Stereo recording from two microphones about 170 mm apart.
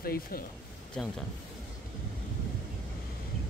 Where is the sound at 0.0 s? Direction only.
60° left (ahead or behind).